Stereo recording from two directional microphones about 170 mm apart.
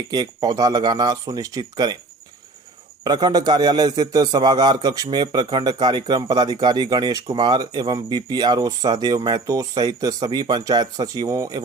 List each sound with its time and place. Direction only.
0.1 s a man's voice: 25° right (ahead or behind)
3.0 s a man's voice: 25° right (ahead or behind)